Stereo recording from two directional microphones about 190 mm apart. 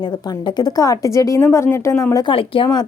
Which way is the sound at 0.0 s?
20° left (ahead or behind).